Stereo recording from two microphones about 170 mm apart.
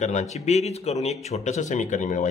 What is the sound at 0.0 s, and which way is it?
Speech, 45° left (ahead or behind).